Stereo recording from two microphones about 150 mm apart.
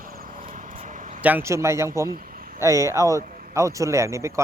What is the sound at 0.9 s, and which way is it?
Vehicle, 60° right (ahead or behind).